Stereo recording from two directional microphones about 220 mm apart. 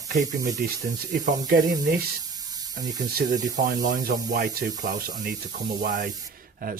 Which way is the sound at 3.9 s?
35° right (ahead or behind).